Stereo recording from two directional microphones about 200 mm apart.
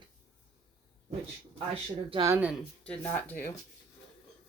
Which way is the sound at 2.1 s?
20° right (ahead or behind).